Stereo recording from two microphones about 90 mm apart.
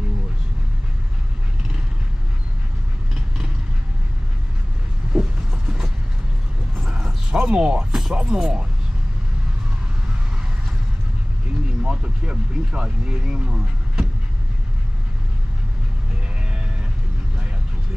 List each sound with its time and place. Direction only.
5.1 s vehicle: 10° right (ahead or behind)
6.8 s a sound: 10° right (ahead or behind)
11.8 s speech: 10° right (ahead or behind)